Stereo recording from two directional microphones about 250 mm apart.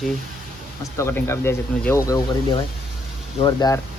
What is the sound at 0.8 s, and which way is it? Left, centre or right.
Speech, centre.